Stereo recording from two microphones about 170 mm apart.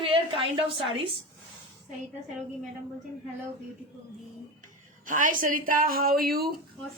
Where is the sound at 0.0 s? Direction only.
30° right (ahead or behind).